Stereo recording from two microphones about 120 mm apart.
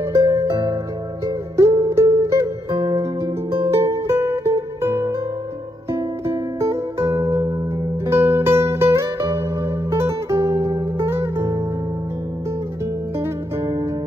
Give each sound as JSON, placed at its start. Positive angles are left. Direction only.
{"t": 0.0, "sound": "music", "side_deg": -25}
{"t": 13.2, "sound": "music", "side_deg": -25}